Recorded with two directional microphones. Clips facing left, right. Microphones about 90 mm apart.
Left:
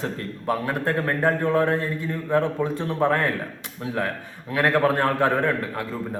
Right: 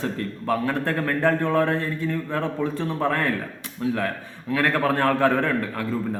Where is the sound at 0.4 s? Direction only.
20° left (ahead or behind).